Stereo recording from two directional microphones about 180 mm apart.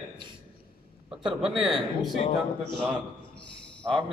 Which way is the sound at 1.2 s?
Centre (ahead or behind).